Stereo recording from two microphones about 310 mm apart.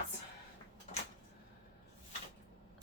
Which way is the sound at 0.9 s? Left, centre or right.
Left.